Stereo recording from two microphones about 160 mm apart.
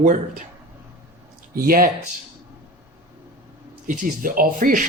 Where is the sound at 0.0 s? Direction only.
55° right (ahead or behind).